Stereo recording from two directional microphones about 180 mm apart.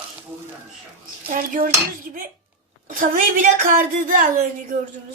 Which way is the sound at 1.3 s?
50° right (ahead or behind).